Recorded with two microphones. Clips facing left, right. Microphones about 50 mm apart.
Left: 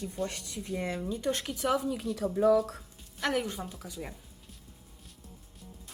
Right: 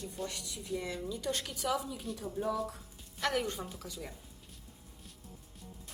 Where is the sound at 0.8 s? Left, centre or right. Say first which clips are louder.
Left 5 dB; left.